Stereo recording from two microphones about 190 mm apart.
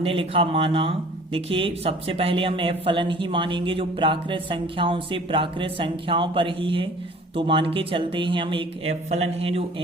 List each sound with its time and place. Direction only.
0.0 s speech: 30° right (ahead or behind)